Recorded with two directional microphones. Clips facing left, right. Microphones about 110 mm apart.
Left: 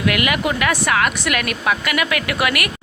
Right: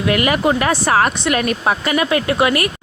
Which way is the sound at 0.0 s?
35° right (ahead or behind).